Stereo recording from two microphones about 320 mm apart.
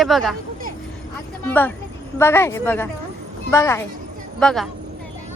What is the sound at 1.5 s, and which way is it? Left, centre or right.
Speech, centre.